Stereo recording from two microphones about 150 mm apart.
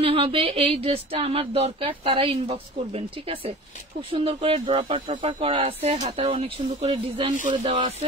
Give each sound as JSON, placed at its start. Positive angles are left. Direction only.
{"t": 0.0, "sound": "speech", "side_deg": -40}